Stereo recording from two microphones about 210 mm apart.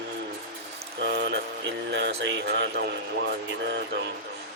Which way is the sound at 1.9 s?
55° right (ahead or behind).